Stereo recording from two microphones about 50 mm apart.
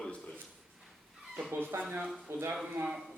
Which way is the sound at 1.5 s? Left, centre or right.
Right.